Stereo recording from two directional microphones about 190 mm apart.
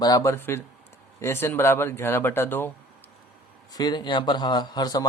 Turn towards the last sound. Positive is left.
turn(degrees=20)  # may be behind; listen again after turning